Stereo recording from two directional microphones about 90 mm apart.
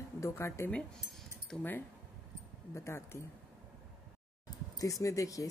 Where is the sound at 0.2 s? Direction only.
30° left (ahead or behind).